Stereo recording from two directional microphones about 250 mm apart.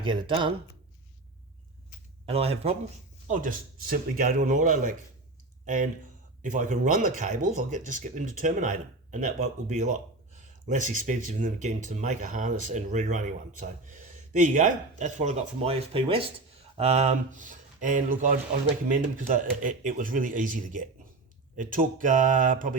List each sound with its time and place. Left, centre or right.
0.0 s speech: centre
2.2 s a man's voice: right